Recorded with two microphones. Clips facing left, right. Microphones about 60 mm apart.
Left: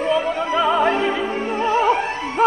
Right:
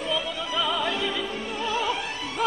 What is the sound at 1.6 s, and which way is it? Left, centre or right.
Music, left.